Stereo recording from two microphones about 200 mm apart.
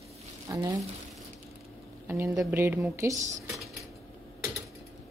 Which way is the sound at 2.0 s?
15° right (ahead or behind).